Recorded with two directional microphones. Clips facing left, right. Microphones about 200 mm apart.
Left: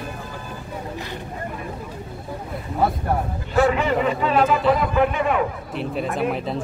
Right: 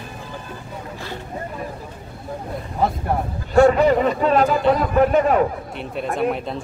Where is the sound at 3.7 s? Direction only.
40° right (ahead or behind).